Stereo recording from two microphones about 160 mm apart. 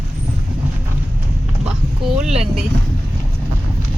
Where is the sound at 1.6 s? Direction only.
5° right (ahead or behind).